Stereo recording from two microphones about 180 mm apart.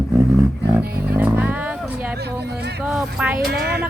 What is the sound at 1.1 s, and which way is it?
Speech, 10° right (ahead or behind).